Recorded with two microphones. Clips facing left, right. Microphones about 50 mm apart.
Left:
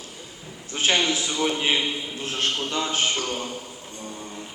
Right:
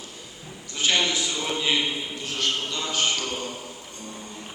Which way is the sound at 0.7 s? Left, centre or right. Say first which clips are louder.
Left 1 dB; left.